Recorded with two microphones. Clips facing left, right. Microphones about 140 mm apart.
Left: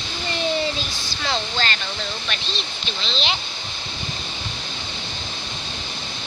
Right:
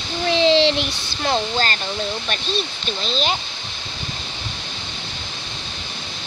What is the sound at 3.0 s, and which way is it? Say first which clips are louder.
Speech: right 4 dB; 45° right (ahead or behind).